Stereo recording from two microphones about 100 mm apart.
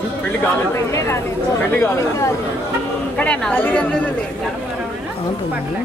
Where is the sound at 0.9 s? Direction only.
30° left (ahead or behind).